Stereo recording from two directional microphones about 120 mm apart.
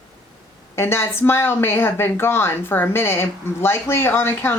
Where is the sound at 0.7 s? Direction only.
20° left (ahead or behind).